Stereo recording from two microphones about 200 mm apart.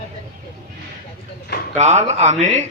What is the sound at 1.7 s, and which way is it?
Speech, 35° right (ahead or behind).